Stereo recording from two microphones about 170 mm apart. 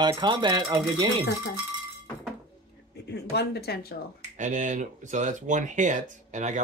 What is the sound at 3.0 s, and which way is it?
Speech, 75° left (ahead or behind).